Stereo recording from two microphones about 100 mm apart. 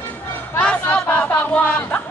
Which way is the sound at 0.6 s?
10° left (ahead or behind).